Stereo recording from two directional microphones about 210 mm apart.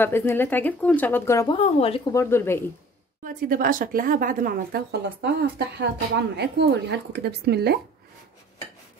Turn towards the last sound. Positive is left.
turn(degrees=-50)  # may be behind; listen again after turning